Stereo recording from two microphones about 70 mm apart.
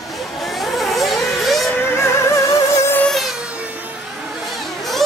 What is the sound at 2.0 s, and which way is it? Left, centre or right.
Music, left.